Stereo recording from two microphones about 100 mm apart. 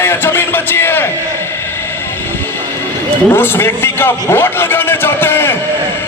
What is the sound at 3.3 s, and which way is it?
A man's voice, 20° left (ahead or behind).